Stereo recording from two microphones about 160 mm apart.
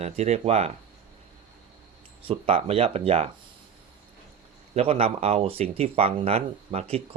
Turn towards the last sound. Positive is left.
turn(degrees=-40)  # may be behind; listen again after turning